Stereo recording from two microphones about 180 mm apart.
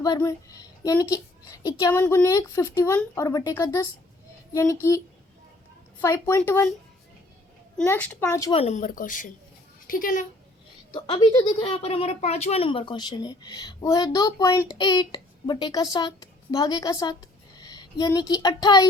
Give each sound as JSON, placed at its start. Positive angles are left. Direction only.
{"t": 0.0, "sound": "speech", "side_deg": 20}
{"t": 6.0, "sound": "speech", "side_deg": 15}
{"t": 7.8, "sound": "speech", "side_deg": 10}
{"t": 8.5, "sound": "a woman's voice", "side_deg": 40}
{"t": 10.9, "sound": "speech", "side_deg": 20}